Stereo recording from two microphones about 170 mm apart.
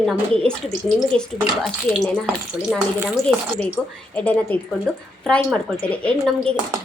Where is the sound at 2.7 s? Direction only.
5° right (ahead or behind).